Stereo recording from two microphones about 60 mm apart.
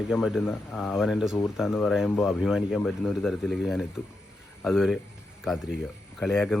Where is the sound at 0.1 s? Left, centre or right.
Centre.